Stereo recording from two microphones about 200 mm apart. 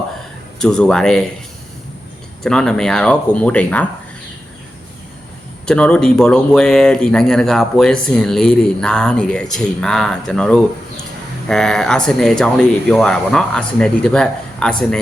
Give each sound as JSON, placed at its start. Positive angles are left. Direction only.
{"t": 0.6, "sound": "speech", "side_deg": 5}
{"t": 2.4, "sound": "speech", "side_deg": 5}
{"t": 5.6, "sound": "speech", "side_deg": 5}